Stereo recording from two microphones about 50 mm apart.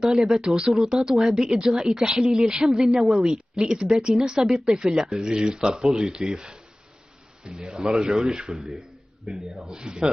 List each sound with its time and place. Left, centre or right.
0.0 s speech: centre
8.5 s a man's voice: centre
9.7 s speech: centre